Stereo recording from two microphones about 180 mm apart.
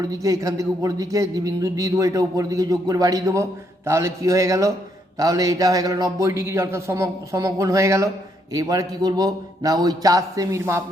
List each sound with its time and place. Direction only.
0.0 s a man's voice: 20° right (ahead or behind)